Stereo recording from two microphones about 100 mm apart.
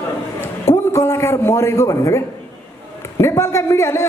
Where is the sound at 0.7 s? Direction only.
30° left (ahead or behind).